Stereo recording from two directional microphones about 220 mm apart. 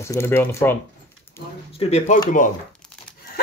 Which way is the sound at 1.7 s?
30° left (ahead or behind).